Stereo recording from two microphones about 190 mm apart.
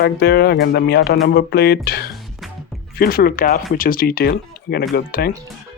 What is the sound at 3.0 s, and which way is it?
Speech, 55° left (ahead or behind).